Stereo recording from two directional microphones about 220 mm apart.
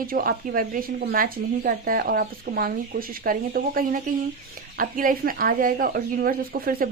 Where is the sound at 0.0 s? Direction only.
40° right (ahead or behind).